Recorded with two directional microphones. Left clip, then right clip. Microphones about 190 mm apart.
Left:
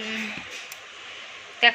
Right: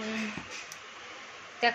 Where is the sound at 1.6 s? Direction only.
Centre (ahead or behind).